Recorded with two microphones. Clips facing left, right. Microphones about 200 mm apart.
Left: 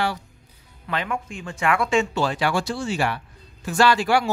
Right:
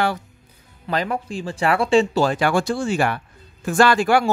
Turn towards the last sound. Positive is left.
turn(degrees=-50)  # may be behind; listen again after turning